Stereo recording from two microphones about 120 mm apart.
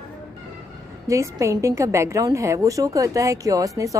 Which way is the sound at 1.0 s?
25° right (ahead or behind).